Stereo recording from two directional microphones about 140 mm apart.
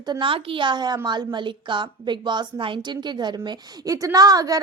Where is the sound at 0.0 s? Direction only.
35° right (ahead or behind).